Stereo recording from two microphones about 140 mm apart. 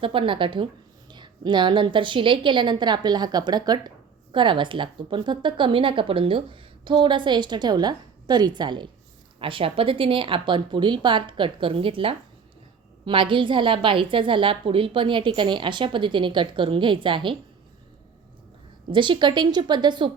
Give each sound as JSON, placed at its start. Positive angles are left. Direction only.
{"t": 0.0, "sound": "a woman's voice", "side_deg": -40}
{"t": 18.9, "sound": "a woman's voice", "side_deg": -35}